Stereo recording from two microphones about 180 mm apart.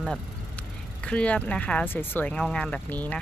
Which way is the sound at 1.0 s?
5° left (ahead or behind).